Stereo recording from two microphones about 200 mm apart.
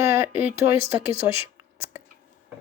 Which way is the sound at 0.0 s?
15° right (ahead or behind).